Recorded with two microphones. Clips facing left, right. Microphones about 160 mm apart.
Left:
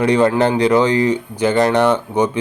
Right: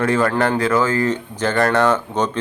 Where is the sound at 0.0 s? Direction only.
20° left (ahead or behind).